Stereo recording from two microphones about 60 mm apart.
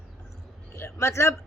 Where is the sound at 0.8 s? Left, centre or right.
Left.